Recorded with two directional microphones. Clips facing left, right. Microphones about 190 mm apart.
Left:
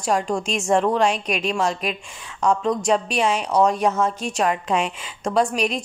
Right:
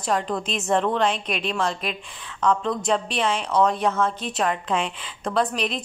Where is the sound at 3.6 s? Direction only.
15° left (ahead or behind).